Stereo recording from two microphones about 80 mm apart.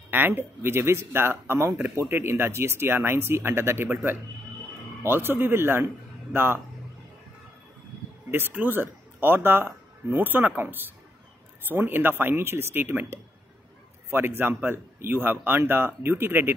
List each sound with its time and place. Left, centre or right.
0.1 s speech: right
8.3 s speech: right